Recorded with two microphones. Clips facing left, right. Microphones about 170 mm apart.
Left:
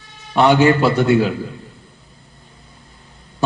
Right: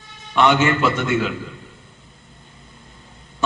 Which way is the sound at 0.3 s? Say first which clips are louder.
Left 4 dB; 35° left (ahead or behind).